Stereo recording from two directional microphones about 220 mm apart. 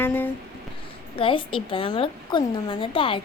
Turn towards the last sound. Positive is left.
turn(degrees=25)  # may be behind; listen again after turning